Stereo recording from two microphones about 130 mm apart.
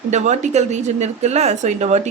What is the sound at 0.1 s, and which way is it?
Speech, 65° right (ahead or behind).